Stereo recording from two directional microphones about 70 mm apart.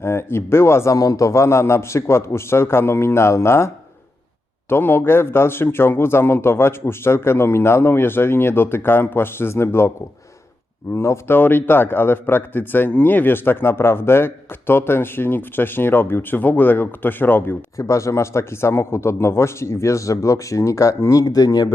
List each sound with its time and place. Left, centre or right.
0.0 s speech: left
0.9 s speech: left
4.7 s speech: left
10.9 s speech: left
11.3 s speech: left
17.7 s a man's voice: left
21.2 s speech: left